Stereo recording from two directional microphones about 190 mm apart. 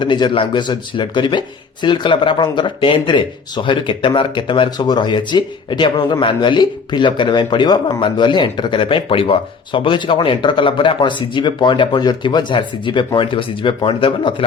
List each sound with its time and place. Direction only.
0.0 s a man's voice: 25° left (ahead or behind)